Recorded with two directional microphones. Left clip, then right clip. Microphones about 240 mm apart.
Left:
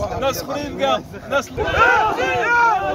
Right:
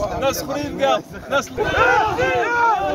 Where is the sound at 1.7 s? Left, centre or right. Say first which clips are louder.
Left 1 dB; centre.